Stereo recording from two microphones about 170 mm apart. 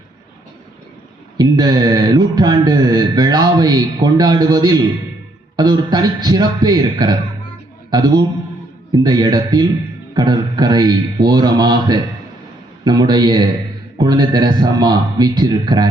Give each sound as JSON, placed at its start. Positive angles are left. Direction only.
{"t": 1.4, "sound": "a man's voice", "side_deg": -25}